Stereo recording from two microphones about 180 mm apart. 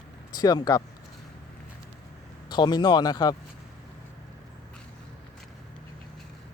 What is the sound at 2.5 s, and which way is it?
Speech, 25° left (ahead or behind).